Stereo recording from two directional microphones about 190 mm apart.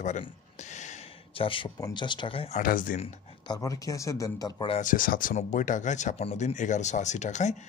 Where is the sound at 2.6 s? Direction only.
45° left (ahead or behind).